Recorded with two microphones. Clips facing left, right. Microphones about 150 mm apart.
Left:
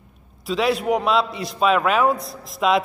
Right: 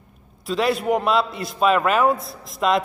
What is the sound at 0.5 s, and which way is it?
A man's voice, centre (ahead or behind).